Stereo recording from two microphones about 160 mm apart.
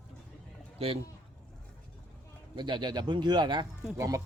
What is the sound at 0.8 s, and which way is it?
Speech, 40° right (ahead or behind).